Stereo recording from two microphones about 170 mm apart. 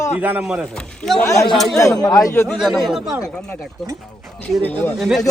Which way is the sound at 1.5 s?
Centre (ahead or behind).